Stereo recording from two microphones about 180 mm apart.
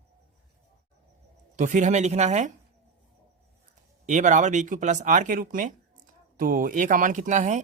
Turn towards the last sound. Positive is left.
turn(degrees=-40)  # may be behind; listen again after turning